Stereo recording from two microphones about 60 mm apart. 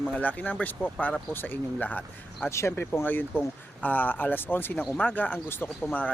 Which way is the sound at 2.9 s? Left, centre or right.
Left.